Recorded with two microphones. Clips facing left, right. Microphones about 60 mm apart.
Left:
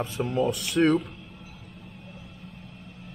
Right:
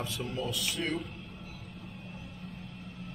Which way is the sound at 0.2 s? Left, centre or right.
Left.